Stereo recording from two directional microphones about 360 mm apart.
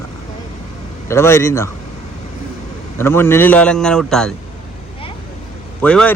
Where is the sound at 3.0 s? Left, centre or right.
Centre.